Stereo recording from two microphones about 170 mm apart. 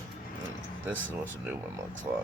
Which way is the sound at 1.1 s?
10° right (ahead or behind).